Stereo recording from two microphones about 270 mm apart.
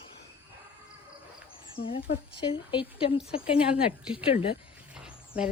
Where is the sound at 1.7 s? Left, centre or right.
Centre.